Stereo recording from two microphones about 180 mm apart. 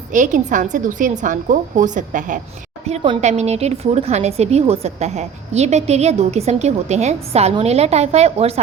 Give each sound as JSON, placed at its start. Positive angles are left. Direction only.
{"t": 0.1, "sound": "a woman's voice", "side_deg": -45}
{"t": 2.8, "sound": "speech", "side_deg": -35}